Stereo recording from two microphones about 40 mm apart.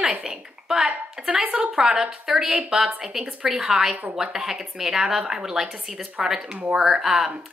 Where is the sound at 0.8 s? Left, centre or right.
Centre.